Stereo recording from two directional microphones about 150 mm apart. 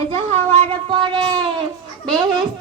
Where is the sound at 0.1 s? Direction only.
45° right (ahead or behind).